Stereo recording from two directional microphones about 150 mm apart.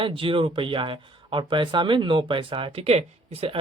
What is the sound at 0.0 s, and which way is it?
Speech, 35° right (ahead or behind).